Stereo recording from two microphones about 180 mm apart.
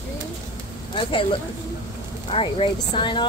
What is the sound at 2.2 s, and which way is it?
Speech, 30° left (ahead or behind).